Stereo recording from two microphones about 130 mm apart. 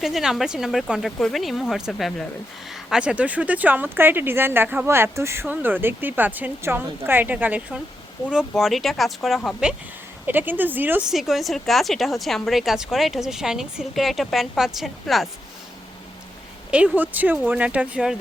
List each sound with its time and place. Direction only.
0.0 s a woman's voice: centre (ahead or behind)
10.2 s speech: 15° right (ahead or behind)
11.1 s a woman's voice: centre (ahead or behind)
16.7 s speech: 10° right (ahead or behind)